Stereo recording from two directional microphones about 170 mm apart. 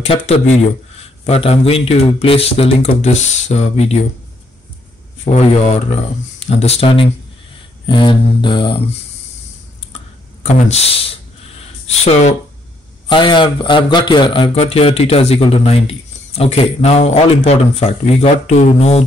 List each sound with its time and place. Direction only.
0.0 s speech: 35° left (ahead or behind)
5.2 s speech: 40° left (ahead or behind)
10.4 s speech: 40° left (ahead or behind)
13.1 s speech: 30° left (ahead or behind)